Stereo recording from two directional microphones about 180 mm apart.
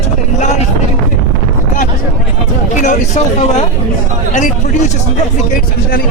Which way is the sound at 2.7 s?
40° left (ahead or behind).